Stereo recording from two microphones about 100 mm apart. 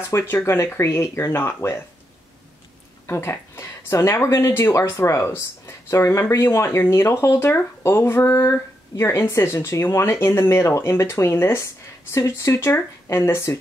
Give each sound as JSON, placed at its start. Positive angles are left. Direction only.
{"t": 0.1, "sound": "speech", "side_deg": 25}
{"t": 3.1, "sound": "a sound", "side_deg": 25}
{"t": 4.2, "sound": "speech", "side_deg": 25}